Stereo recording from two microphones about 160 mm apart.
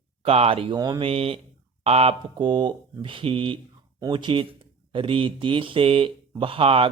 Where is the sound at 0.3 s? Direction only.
40° right (ahead or behind).